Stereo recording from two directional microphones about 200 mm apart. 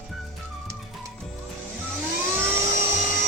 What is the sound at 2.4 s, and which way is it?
Dental drill, 10° right (ahead or behind).